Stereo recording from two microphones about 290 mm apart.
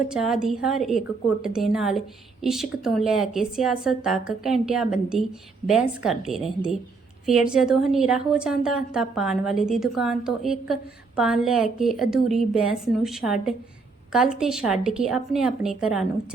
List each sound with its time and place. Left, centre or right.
0.1 s a woman's voice: centre